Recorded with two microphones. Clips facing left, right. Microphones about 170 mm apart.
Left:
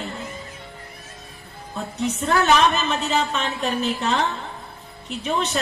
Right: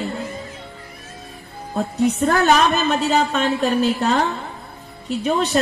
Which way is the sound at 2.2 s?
40° right (ahead or behind).